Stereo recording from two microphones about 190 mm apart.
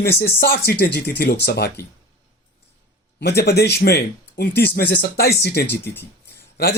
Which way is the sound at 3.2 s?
60° left (ahead or behind).